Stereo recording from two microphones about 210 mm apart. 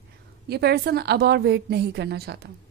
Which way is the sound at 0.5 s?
50° right (ahead or behind).